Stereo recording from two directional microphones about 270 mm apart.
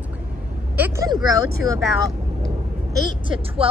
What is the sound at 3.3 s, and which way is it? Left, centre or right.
Speech, right.